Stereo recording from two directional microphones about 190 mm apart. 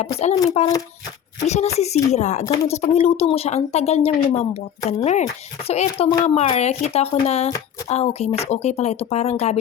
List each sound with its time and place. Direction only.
0.0 s speech: 35° left (ahead or behind)